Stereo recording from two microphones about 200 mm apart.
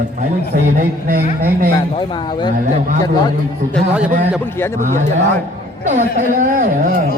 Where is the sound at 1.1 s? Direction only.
45° right (ahead or behind).